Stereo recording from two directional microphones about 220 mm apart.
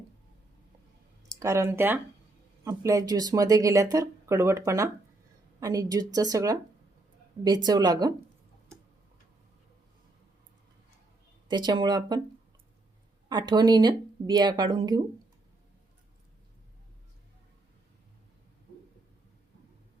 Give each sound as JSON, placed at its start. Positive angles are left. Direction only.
{"t": 1.4, "sound": "speech", "side_deg": -10}
{"t": 11.4, "sound": "speech", "side_deg": -20}
{"t": 13.2, "sound": "speech", "side_deg": -20}